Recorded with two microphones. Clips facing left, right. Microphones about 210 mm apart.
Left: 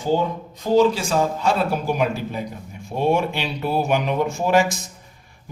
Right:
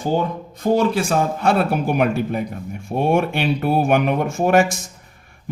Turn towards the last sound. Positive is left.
turn(degrees=-55)  # may be behind; listen again after turning